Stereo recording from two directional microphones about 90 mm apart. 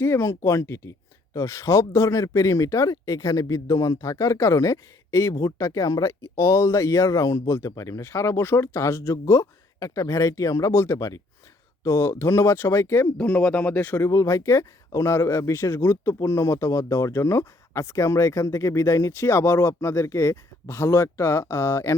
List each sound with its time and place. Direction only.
0.0 s speech: 30° left (ahead or behind)
13.1 s a man's voice: 15° left (ahead or behind)
14.0 s speech: 35° left (ahead or behind)